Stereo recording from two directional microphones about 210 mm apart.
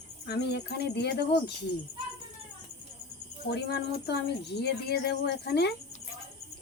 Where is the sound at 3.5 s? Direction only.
50° left (ahead or behind).